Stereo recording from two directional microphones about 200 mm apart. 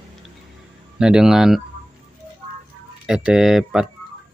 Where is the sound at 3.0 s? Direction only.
5° right (ahead or behind).